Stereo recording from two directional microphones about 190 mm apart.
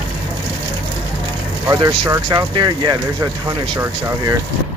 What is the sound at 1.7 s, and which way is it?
Speech, 20° right (ahead or behind).